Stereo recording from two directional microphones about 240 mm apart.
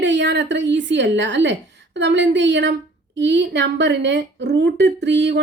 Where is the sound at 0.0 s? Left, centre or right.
Right.